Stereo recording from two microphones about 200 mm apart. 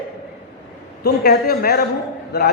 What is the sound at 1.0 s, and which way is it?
A man's voice, 50° left (ahead or behind).